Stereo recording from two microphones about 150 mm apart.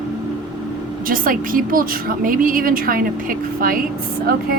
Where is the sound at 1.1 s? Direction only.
65° right (ahead or behind).